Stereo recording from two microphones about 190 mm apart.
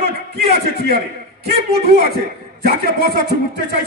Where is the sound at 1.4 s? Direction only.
60° right (ahead or behind).